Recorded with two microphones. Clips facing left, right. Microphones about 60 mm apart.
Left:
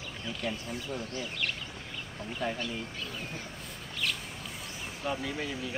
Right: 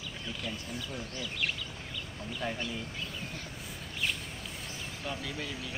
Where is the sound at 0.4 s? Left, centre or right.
Left.